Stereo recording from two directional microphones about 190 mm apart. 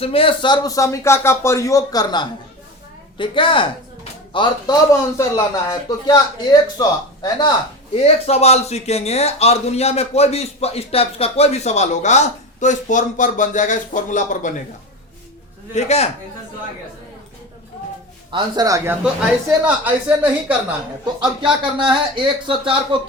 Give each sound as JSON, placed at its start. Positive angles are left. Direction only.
{"t": 0.0, "sound": "a man's voice", "side_deg": 30}
{"t": 7.9, "sound": "a man's voice", "side_deg": 35}
{"t": 15.7, "sound": "a man's voice", "side_deg": 35}
{"t": 18.3, "sound": "speech", "side_deg": -25}
{"t": 19.0, "sound": "a woman's voice", "side_deg": -5}
{"t": 21.0, "sound": "speech", "side_deg": -25}